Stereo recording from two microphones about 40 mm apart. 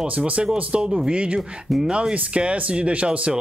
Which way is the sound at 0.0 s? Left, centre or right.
Right.